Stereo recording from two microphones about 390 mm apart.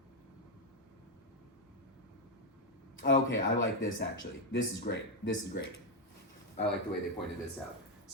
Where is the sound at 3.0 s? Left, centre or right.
Left.